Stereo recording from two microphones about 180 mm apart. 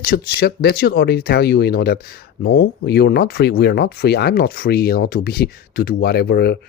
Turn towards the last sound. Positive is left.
turn(degrees=60)  # may be behind; listen again after turning